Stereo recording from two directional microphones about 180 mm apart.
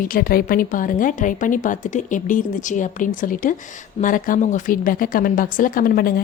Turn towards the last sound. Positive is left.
turn(degrees=55)  # may be behind; listen again after turning